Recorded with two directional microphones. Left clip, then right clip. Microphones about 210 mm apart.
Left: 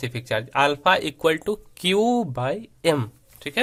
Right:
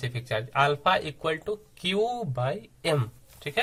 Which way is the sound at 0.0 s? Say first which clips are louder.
Left 5 dB; 45° left (ahead or behind).